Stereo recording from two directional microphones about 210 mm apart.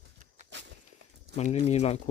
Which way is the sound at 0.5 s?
55° right (ahead or behind).